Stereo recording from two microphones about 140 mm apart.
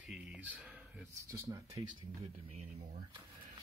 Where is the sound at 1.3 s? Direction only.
20° right (ahead or behind).